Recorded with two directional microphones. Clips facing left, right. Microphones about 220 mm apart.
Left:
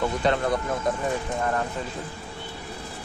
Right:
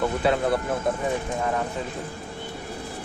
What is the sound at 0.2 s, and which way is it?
Speech, 5° right (ahead or behind).